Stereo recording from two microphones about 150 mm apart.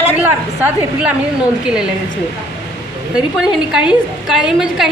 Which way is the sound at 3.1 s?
5° right (ahead or behind).